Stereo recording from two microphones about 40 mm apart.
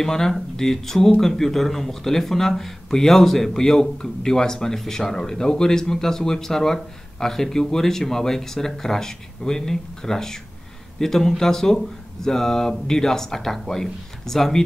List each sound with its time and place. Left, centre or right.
0.0 s speech: centre